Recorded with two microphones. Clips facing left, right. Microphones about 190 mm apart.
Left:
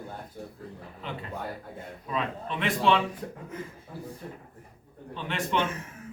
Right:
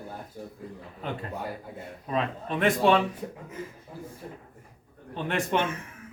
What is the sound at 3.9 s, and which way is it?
Speech, 15° right (ahead or behind).